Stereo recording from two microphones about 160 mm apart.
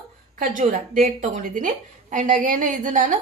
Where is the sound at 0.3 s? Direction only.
55° right (ahead or behind).